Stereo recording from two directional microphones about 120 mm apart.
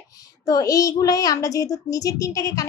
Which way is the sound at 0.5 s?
30° left (ahead or behind).